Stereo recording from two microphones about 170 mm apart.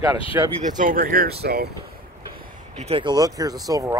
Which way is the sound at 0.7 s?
55° right (ahead or behind).